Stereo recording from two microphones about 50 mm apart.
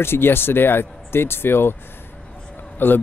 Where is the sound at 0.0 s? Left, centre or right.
Left.